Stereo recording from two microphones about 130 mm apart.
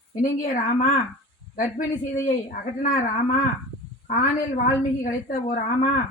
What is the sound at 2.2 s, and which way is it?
A woman's voice, 90° left.